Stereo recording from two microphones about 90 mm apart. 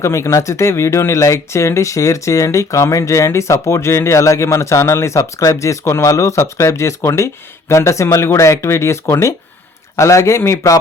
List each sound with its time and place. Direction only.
0.0 s speech: 35° left (ahead or behind)